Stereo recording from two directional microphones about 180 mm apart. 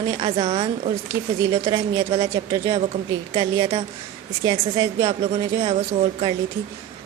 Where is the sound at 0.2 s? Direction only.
30° right (ahead or behind).